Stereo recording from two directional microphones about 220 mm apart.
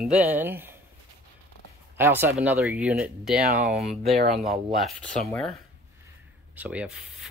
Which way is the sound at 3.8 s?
Centre (ahead or behind).